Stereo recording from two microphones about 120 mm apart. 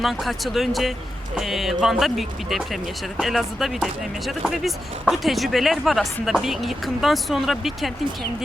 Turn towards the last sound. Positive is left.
turn(degrees=0)  # may be behind; listen again after turning